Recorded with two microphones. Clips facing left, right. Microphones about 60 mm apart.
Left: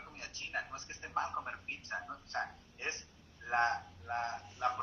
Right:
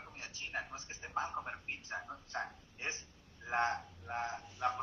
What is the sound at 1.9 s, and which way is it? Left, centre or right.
Speech, left.